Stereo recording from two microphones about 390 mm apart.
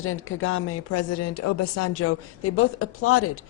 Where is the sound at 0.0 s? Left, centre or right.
Left.